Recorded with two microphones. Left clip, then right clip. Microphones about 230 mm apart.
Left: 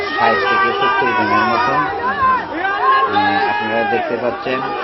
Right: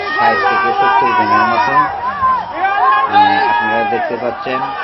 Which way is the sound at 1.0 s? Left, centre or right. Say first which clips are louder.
Right 3 dB; left.